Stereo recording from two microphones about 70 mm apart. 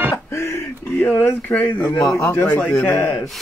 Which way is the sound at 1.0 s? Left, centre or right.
Left.